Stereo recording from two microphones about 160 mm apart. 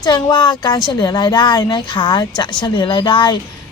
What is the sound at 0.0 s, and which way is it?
A woman's voice, 25° left (ahead or behind).